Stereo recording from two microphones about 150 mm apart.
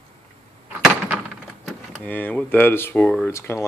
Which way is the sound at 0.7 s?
10° right (ahead or behind).